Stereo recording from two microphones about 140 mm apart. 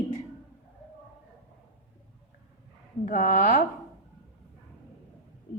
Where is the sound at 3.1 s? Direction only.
65° left (ahead or behind).